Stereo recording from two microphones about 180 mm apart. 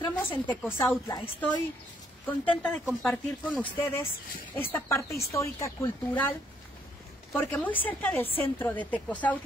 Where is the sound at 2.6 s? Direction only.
5° left (ahead or behind).